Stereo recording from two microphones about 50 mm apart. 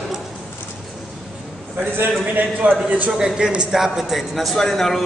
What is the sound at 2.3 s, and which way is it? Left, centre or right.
Speech, right.